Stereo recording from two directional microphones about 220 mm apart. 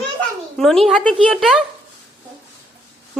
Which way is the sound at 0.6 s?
Centre (ahead or behind).